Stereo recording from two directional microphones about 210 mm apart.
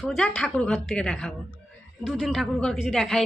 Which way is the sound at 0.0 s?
5° left (ahead or behind).